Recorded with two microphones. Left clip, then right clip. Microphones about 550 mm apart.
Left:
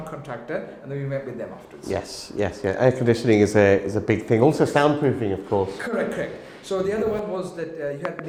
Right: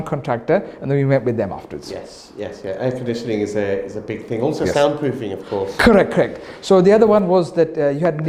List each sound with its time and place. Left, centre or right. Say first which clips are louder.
0.3 s speech: right 13 dB; right
2.4 s speech: left 3 dB; left
5.8 s speech: right 13 dB; right
6.7 s a man's voice: right 12 dB; right